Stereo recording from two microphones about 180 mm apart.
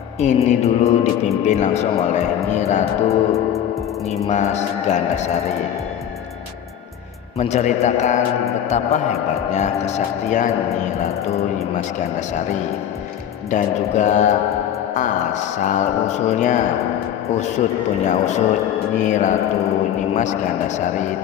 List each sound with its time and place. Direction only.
0.2 s a man's voice: 40° left (ahead or behind)
4.3 s a man's voice: 40° left (ahead or behind)
7.3 s a man's voice: 40° left (ahead or behind)